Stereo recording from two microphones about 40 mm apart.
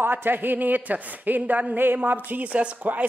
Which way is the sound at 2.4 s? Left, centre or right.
Right.